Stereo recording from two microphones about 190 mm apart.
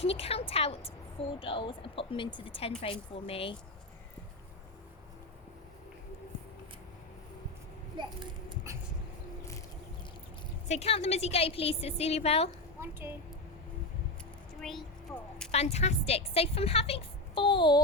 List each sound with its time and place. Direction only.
0.0 s a woman's voice: 30° left (ahead or behind)
7.9 s a child's voice: 25° right (ahead or behind)
10.7 s a woman's voice: 35° left (ahead or behind)
12.8 s a woman's voice: 10° right (ahead or behind)
14.6 s a woman's voice: centre (ahead or behind)
15.5 s a woman's voice: 35° left (ahead or behind)